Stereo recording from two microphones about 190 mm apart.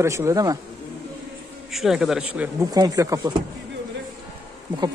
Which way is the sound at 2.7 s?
20° right (ahead or behind).